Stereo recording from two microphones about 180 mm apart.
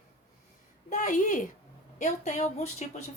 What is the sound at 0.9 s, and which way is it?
A woman's voice, 45° left (ahead or behind).